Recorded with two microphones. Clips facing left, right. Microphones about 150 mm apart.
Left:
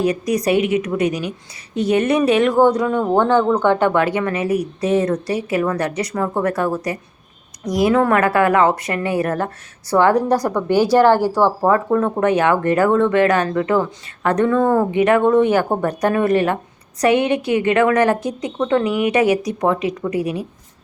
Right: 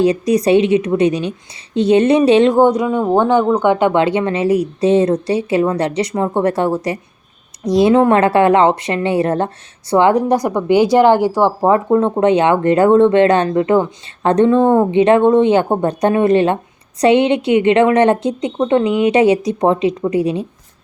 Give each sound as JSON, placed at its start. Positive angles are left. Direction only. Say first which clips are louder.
{"t": 0.0, "sound": "a woman's voice", "louder": "right 5 dB", "side_deg": -25}